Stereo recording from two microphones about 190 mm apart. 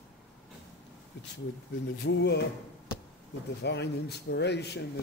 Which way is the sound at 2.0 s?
65° left (ahead or behind).